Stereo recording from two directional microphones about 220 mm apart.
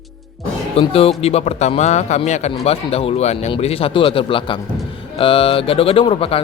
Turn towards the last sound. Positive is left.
turn(degrees=25)  # may be behind; listen again after turning